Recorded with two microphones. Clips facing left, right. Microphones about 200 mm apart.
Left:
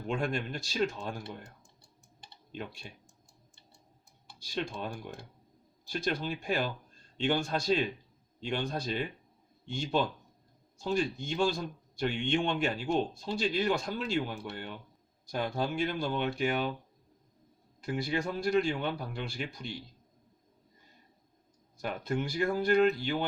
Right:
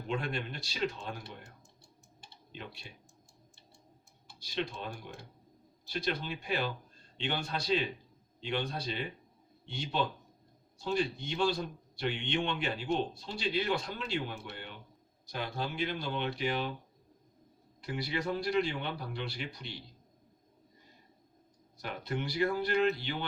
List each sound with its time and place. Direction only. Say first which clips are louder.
0.1 s a man's voice: left 3 dB; 45° left (ahead or behind)
2.3 s typing: left 5 dB; 45° left (ahead or behind)
4.4 s speech: left 1 dB; 45° left (ahead or behind)
5.9 s a man's voice: left 2 dB; 45° left (ahead or behind)
17.7 s a man's voice: left 4 dB; 45° left (ahead or behind)
21.8 s a man's voice: left 4 dB; 45° left (ahead or behind)